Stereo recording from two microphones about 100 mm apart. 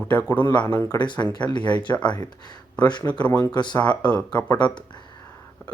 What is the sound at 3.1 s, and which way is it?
Speech, 15° left (ahead or behind).